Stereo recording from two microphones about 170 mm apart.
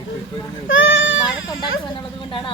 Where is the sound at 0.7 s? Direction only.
90° left.